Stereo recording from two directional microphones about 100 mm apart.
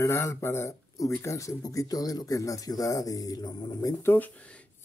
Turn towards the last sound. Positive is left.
turn(degrees=20)  # may be behind; listen again after turning